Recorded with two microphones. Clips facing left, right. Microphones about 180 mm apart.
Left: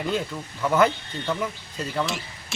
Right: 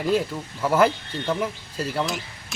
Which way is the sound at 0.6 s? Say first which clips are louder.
Right 1 dB; 5° right (ahead or behind).